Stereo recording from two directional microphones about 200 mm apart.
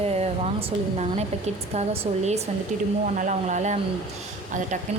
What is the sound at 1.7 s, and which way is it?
Speech, 35° right (ahead or behind).